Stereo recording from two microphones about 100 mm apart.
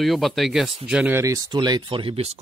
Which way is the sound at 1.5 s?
45° right (ahead or behind).